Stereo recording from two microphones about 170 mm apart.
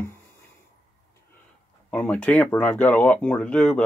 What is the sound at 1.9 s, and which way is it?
Speech, 5° left (ahead or behind).